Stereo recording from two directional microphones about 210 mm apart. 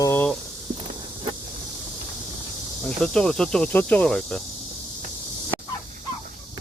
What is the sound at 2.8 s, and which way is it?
Speech, centre (ahead or behind).